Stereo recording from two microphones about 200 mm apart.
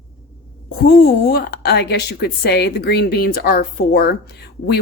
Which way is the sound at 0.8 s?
45° left (ahead or behind).